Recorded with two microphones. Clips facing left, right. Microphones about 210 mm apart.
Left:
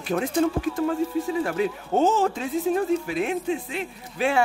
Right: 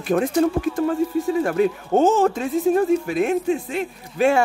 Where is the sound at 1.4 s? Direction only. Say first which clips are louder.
Right 5 dB; 50° right (ahead or behind).